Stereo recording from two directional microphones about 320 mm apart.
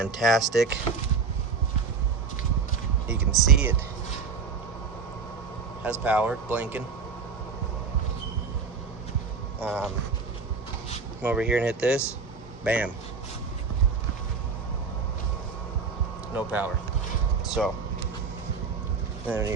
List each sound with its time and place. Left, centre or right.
0.0 s speech: centre
3.1 s speech: centre
5.9 s speech: centre
9.6 s speech: centre
11.2 s speech: centre
16.3 s speech: centre
19.3 s speech: centre